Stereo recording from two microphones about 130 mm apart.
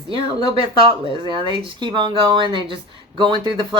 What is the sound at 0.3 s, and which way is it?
Speech, 40° left (ahead or behind).